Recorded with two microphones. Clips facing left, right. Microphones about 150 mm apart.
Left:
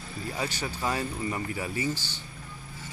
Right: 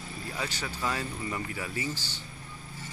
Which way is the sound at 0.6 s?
30° left (ahead or behind).